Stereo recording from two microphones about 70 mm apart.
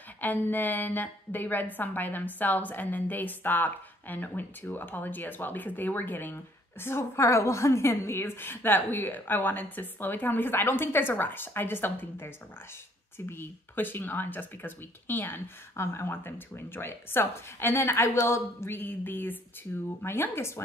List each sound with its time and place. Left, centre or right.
0.2 s a woman's voice: left